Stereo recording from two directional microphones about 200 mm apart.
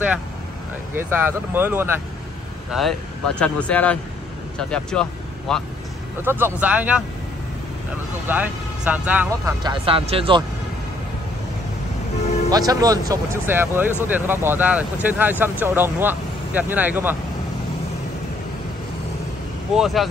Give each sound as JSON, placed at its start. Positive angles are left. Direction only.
{"t": 0.9, "sound": "speech", "side_deg": -10}
{"t": 2.7, "sound": "speech", "side_deg": 0}
{"t": 6.2, "sound": "speech", "side_deg": -10}
{"t": 8.3, "sound": "speech", "side_deg": -10}
{"t": 9.6, "sound": "speech", "side_deg": -25}
{"t": 12.4, "sound": "speech", "side_deg": -20}
{"t": 19.7, "sound": "speech", "side_deg": 0}